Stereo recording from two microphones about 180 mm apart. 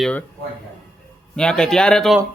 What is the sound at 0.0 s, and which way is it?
Speech, 5° left (ahead or behind).